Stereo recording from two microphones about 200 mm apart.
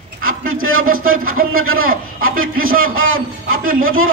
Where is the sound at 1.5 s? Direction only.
90° right.